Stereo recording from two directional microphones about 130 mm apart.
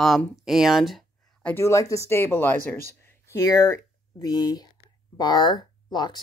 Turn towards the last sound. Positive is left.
turn(degrees=35)  # may be behind; listen again after turning